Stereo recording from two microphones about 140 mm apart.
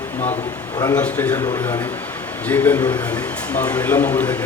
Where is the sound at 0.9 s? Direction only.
10° left (ahead or behind).